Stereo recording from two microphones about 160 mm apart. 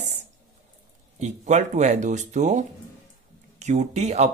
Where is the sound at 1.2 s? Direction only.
45° right (ahead or behind).